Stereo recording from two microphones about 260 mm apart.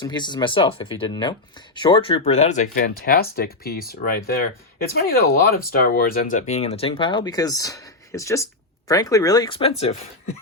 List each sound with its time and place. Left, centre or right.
0.0 s speech: centre